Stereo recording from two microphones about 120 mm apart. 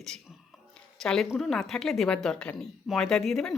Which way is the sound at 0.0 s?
5° left (ahead or behind).